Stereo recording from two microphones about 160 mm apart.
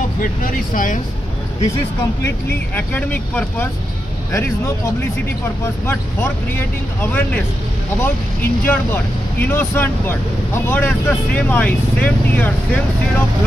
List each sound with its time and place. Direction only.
0.2 s speech: 55° left (ahead or behind)
2.7 s speech: 10° left (ahead or behind)
5.9 s speech: 15° left (ahead or behind)